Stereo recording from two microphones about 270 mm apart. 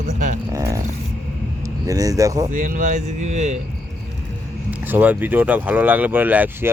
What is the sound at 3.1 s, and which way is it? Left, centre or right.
Speech, right.